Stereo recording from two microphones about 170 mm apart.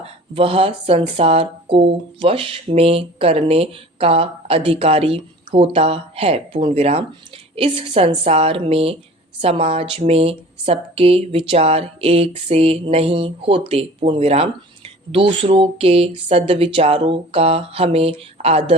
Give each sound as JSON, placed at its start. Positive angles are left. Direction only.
{"t": 0.0, "sound": "speech", "side_deg": -35}